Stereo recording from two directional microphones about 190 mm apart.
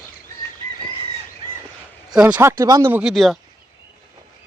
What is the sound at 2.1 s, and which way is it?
Speech, 5° right (ahead or behind).